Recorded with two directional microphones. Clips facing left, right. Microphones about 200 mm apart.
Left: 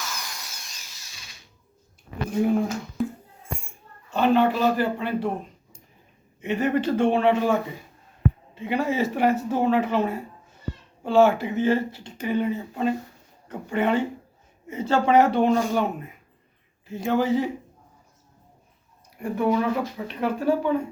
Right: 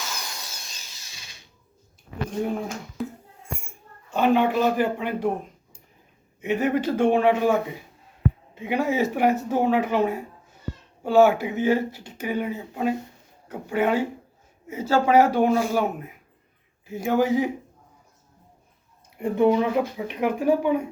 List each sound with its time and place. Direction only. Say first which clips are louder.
0.2 s tools: right 1 dB; 30° right (ahead or behind)
2.4 s speech: left 6 dB; centre (ahead or behind)
4.1 s speech: even; 10° right (ahead or behind)
6.4 s speech: even; 10° right (ahead or behind)
19.2 s speech: right 3 dB; 20° right (ahead or behind)